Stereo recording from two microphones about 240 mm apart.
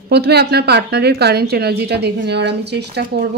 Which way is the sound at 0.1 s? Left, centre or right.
Right.